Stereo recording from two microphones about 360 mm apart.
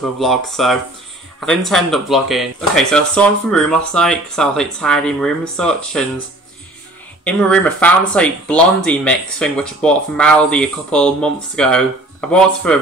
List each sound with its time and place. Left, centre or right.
0.0 s speech: centre
7.2 s speech: centre